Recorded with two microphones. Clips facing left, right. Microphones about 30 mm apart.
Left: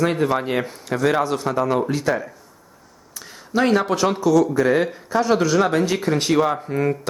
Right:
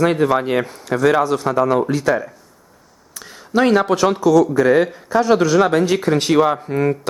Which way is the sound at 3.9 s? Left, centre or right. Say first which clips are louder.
Right 4 dB; right.